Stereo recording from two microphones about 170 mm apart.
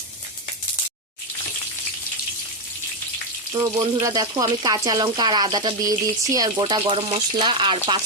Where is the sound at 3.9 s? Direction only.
25° right (ahead or behind).